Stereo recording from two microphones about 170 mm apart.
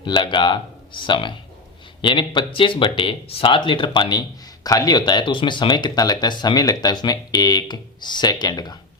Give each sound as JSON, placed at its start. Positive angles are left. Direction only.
{"t": 0.0, "sound": "speech", "side_deg": 30}